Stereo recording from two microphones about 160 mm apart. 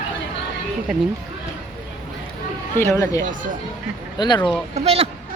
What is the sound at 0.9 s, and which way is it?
Speech, 5° right (ahead or behind).